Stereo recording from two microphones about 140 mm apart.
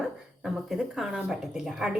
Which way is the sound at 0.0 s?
5° right (ahead or behind).